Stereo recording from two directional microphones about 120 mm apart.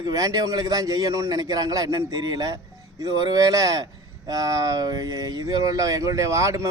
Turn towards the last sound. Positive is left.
turn(degrees=-25)  # may be behind; listen again after turning